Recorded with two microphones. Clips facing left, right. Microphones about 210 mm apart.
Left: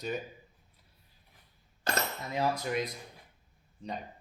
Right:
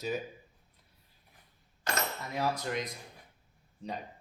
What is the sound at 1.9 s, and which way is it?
Cutlery, 30° left (ahead or behind).